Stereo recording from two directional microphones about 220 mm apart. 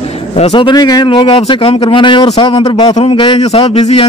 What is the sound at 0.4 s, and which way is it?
A man's voice, 20° left (ahead or behind).